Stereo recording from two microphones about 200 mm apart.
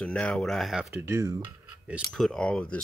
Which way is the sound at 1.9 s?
5° right (ahead or behind).